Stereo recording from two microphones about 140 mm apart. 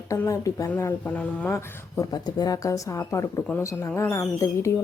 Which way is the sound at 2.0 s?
30° left (ahead or behind).